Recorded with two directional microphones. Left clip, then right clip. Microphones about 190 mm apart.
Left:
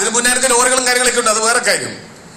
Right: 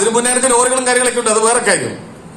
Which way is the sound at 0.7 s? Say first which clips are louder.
Even; 25° left (ahead or behind).